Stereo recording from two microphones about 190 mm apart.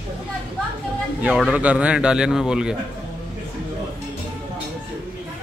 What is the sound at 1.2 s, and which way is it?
A man's voice, 5° right (ahead or behind).